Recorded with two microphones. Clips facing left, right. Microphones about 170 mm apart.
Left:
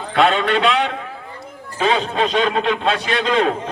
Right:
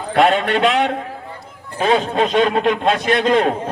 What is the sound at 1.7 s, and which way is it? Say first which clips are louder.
A man's voice: right 2 dB; 50° right (ahead or behind).